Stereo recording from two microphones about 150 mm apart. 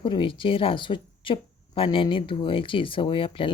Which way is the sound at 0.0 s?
35° left (ahead or behind).